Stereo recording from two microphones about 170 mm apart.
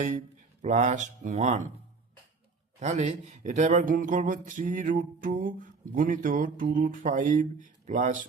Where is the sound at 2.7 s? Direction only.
45° right (ahead or behind).